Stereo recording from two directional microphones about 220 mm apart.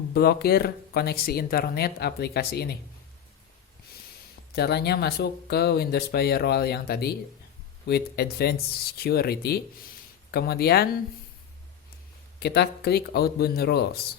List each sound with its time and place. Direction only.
0.1 s speech: 45° left (ahead or behind)
4.5 s speech: 45° left (ahead or behind)
12.4 s speech: 50° left (ahead or behind)